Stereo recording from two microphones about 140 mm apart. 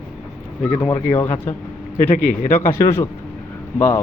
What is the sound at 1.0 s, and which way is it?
Speech, 15° left (ahead or behind).